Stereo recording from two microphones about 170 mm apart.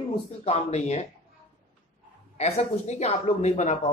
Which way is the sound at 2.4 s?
40° left (ahead or behind).